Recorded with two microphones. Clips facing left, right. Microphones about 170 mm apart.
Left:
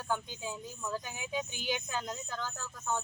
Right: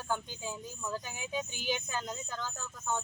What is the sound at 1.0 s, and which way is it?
Speech, 10° left (ahead or behind).